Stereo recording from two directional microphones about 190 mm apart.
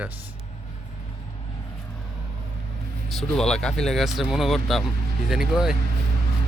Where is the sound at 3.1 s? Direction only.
Centre (ahead or behind).